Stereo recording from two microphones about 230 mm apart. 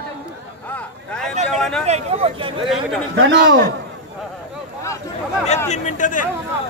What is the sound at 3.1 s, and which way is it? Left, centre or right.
Speech, right.